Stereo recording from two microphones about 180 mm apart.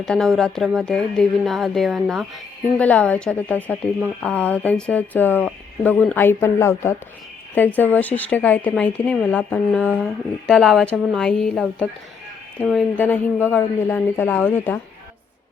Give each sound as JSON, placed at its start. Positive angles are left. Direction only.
{"t": 0.0, "sound": "speech", "side_deg": 0}
{"t": 13.0, "sound": "speech", "side_deg": 10}